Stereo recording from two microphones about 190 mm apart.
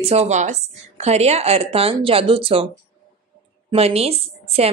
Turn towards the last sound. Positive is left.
turn(degrees=-30)  # may be behind; listen again after turning